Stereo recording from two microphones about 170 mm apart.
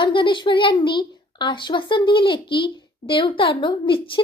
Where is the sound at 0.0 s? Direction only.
30° left (ahead or behind).